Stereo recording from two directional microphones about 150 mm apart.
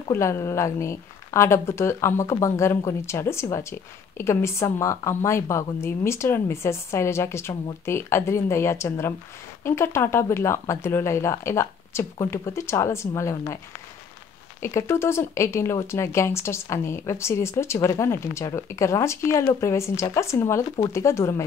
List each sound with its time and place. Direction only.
0.1 s a woman's voice: 20° left (ahead or behind)
14.6 s speech: 20° left (ahead or behind)